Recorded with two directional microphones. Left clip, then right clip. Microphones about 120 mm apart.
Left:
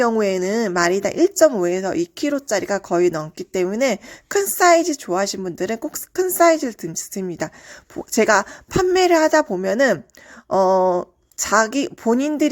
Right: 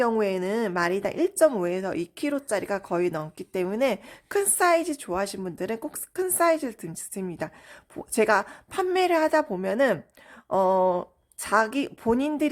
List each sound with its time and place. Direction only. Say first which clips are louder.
0.2 s speech: left 6 dB; 35° left (ahead or behind)